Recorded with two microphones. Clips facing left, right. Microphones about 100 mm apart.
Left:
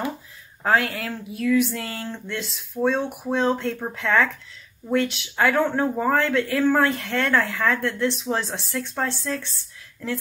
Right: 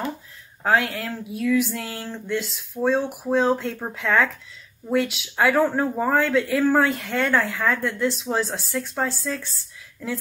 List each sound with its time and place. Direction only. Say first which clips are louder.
0.7 s speech: even; centre (ahead or behind)